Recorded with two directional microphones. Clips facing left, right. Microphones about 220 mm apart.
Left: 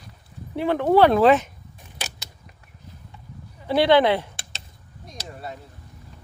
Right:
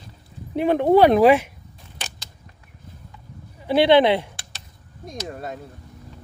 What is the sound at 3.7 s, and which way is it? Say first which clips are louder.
Speech: right 2 dB; 15° right (ahead or behind).